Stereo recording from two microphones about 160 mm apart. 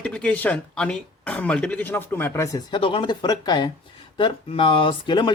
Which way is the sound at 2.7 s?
35° left (ahead or behind).